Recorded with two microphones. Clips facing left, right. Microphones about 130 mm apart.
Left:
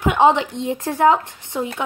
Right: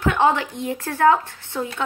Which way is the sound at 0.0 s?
15° left (ahead or behind).